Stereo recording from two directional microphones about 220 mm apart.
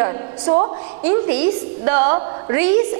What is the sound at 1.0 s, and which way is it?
A woman's voice, 10° right (ahead or behind).